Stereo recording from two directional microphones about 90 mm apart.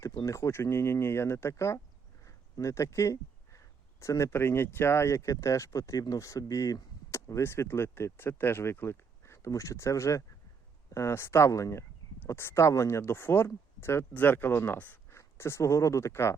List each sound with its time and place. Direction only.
0.2 s speech: 35° left (ahead or behind)
2.2 s a sound: 35° left (ahead or behind)
4.0 s speech: 30° left (ahead or behind)